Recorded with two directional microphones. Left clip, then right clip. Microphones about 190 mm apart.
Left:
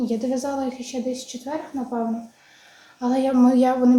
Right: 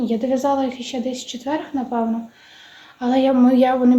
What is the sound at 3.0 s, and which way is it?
Speech, 25° right (ahead or behind).